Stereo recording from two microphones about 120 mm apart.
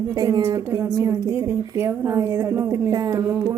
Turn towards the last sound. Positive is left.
turn(degrees=-25)  # may be behind; listen again after turning